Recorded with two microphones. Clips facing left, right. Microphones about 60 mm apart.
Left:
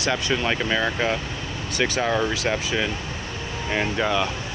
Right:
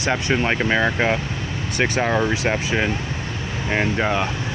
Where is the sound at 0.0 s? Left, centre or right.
Right.